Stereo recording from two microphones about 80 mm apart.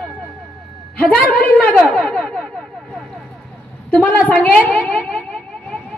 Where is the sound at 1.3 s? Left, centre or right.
Centre.